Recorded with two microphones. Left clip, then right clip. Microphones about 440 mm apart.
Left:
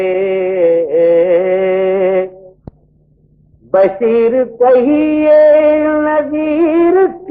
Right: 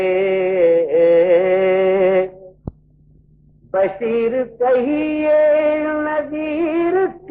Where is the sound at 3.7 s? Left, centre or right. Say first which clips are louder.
Left 7 dB; right.